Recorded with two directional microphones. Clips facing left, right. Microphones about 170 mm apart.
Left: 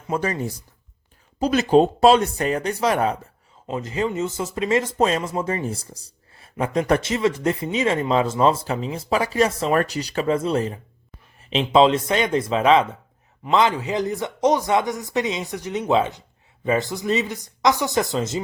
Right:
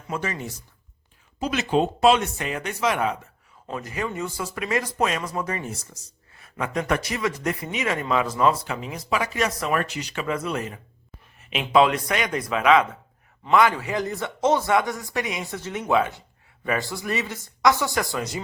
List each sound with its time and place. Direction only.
0.1 s speech: 35° left (ahead or behind)
3.7 s speech: 25° left (ahead or behind)